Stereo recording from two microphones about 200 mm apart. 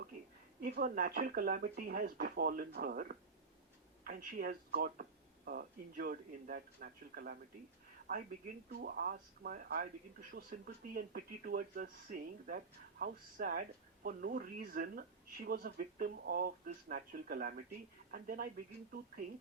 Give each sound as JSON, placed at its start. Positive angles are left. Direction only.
{"t": 0.6, "sound": "speech", "side_deg": -45}
{"t": 8.7, "sound": "speech", "side_deg": -50}